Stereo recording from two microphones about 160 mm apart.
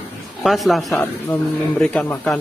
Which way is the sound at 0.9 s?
20° left (ahead or behind).